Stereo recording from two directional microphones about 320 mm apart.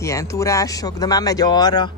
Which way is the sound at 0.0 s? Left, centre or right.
Centre.